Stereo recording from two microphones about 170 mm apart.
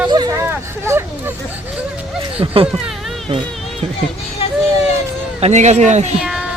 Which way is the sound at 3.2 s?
30° right (ahead or behind).